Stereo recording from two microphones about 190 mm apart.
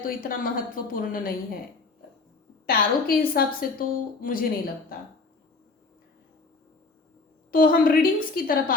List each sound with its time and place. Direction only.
0.0 s a woman's voice: 50° left (ahead or behind)
2.6 s a woman's voice: 50° left (ahead or behind)
7.5 s a woman's voice: 50° left (ahead or behind)